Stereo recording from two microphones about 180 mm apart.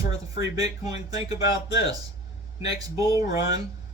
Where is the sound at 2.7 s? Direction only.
20° right (ahead or behind).